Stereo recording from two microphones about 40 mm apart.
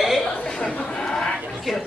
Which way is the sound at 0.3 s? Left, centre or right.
Left.